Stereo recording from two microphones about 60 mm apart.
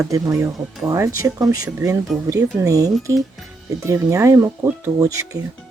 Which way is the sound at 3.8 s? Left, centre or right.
Right.